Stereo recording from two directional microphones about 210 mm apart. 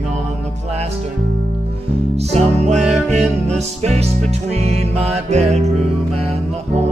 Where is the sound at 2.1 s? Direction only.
30° right (ahead or behind).